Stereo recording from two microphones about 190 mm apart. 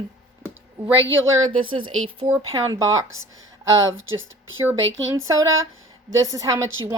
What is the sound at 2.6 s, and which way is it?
Speech, 15° right (ahead or behind).